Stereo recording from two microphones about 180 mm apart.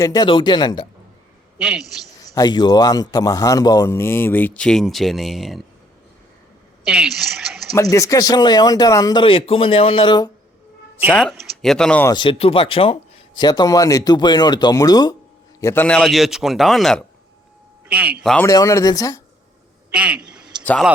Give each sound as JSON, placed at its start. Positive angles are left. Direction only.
{"t": 0.0, "sound": "speech", "side_deg": 20}
{"t": 1.5, "sound": "a man's voice", "side_deg": -5}
{"t": 2.3, "sound": "a man's voice", "side_deg": 20}
{"t": 6.8, "sound": "a woman's voice", "side_deg": -5}
{"t": 7.7, "sound": "speech", "side_deg": 20}
{"t": 11.1, "sound": "speech", "side_deg": 5}
{"t": 12.0, "sound": "speech", "side_deg": 25}
{"t": 15.6, "sound": "a man's voice", "side_deg": 10}
{"t": 16.0, "sound": "a man's voice", "side_deg": 0}
{"t": 18.4, "sound": "a man's voice", "side_deg": 20}
{"t": 19.9, "sound": "a sound", "side_deg": -5}
{"t": 20.7, "sound": "a man's voice", "side_deg": 0}